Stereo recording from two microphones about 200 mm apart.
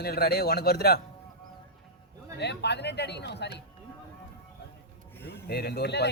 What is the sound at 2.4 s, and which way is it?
Speech, 60° left (ahead or behind).